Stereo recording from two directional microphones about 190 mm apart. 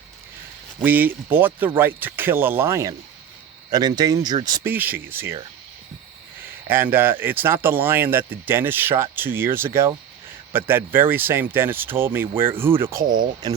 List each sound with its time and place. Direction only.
0.8 s speech: 10° right (ahead or behind)
4.7 s speech: 10° right (ahead or behind)
6.7 s speech: 10° right (ahead or behind)